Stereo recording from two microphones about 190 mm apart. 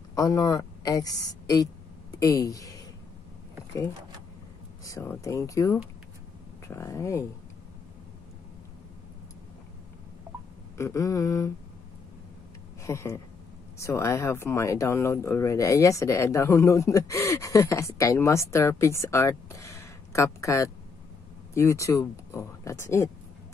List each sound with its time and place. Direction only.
0.1 s a woman's voice: 20° left (ahead or behind)
4.8 s speech: 15° left (ahead or behind)
10.8 s speech: 15° left (ahead or behind)
12.8 s speech: 15° left (ahead or behind)